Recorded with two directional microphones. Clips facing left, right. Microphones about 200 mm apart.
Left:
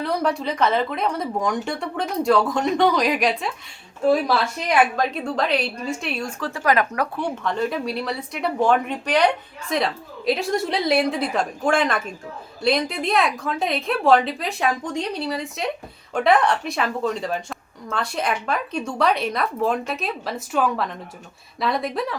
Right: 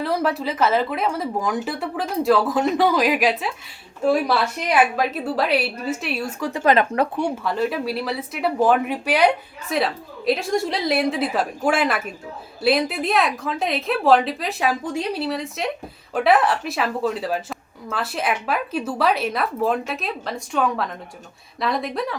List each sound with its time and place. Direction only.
0.0 s speech: centre (ahead or behind)
6.5 s speech: 25° right (ahead or behind)
7.2 s speech: 10° right (ahead or behind)